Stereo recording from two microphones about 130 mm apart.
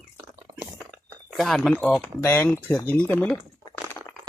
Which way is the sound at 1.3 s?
Centre (ahead or behind).